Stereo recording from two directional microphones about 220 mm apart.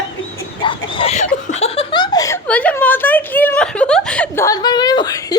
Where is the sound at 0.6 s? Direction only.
25° left (ahead or behind).